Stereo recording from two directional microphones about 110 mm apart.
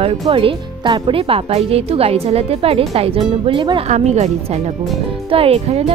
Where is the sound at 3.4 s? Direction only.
45° right (ahead or behind).